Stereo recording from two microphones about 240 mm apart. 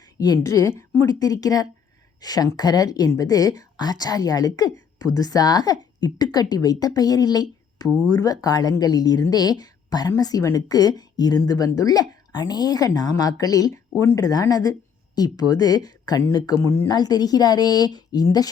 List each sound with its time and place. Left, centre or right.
0.4 s a woman's voice: centre